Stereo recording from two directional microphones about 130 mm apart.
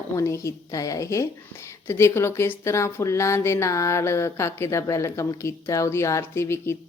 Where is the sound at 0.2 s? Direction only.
20° left (ahead or behind).